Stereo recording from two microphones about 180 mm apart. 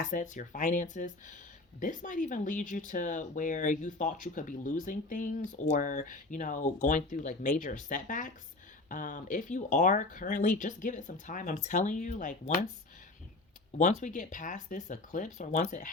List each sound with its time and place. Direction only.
0.0 s speech: 45° left (ahead or behind)
13.7 s speech: 40° left (ahead or behind)